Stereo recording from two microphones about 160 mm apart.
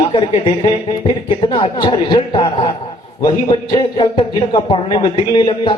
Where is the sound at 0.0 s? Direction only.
35° left (ahead or behind).